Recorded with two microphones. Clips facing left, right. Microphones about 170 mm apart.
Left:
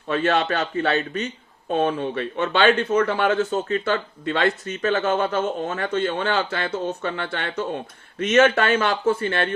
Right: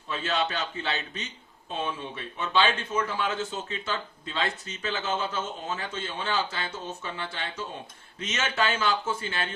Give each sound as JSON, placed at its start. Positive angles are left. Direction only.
{"t": 0.1, "sound": "speech", "side_deg": 65}